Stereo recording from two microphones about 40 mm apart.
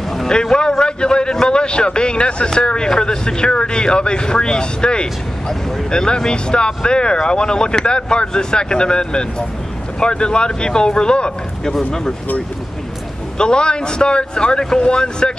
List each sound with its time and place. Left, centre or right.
0.3 s a man's voice: left
11.7 s speech: centre
13.4 s a man's voice: left